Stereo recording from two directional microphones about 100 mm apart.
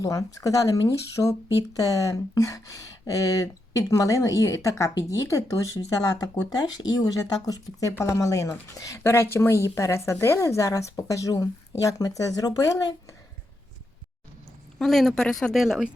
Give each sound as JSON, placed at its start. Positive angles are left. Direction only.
{"t": 0.0, "sound": "speech", "side_deg": 35}
{"t": 14.8, "sound": "a woman's voice", "side_deg": 5}